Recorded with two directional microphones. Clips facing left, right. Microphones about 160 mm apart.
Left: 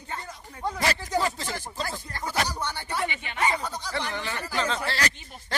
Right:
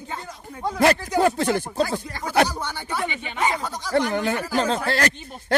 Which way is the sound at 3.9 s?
50° right (ahead or behind).